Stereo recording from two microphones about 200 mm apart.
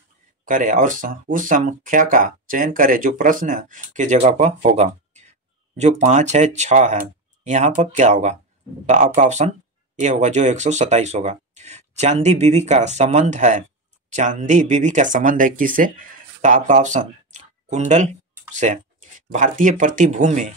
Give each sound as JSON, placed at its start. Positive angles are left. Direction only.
{"t": 0.5, "sound": "speech", "side_deg": -40}
{"t": 18.5, "sound": "tick-tock", "side_deg": -35}
{"t": 19.3, "sound": "speech", "side_deg": -40}